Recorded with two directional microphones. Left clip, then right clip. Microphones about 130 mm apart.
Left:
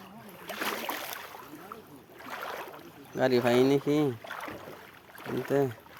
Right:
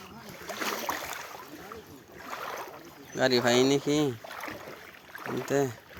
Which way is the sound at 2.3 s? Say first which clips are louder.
Right 1 dB; 5° right (ahead or behind).